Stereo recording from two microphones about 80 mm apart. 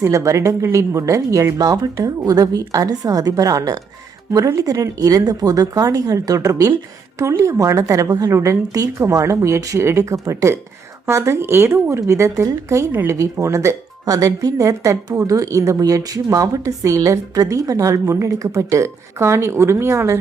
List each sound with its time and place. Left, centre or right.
0.0 s speech: right
1.5 s speech: right